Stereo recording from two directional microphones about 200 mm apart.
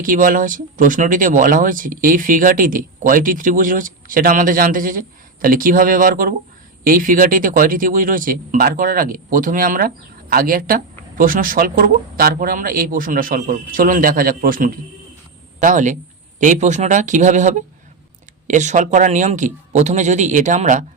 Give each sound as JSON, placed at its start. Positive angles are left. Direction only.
{"t": 0.0, "sound": "speech", "side_deg": -45}